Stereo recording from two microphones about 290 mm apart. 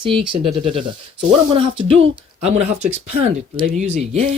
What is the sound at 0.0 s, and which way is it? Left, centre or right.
Speech, centre.